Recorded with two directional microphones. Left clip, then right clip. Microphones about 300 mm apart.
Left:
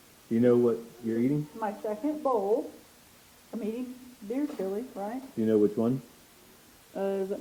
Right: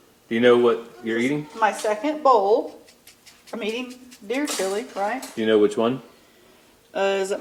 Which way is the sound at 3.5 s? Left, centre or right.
Centre.